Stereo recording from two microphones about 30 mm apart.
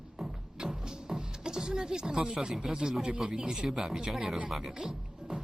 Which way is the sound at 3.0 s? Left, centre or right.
Right.